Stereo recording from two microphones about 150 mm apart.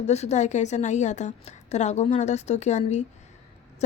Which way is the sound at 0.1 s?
50° left (ahead or behind).